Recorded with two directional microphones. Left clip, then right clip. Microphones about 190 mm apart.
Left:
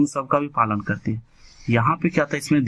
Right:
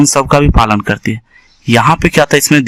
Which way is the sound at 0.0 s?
40° right (ahead or behind).